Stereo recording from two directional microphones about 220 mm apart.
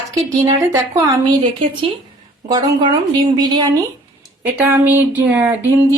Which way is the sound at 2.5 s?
15° right (ahead or behind).